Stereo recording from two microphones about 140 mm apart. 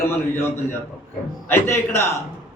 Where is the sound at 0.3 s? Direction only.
15° left (ahead or behind).